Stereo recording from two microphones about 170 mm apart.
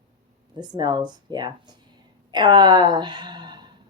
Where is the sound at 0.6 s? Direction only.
25° right (ahead or behind).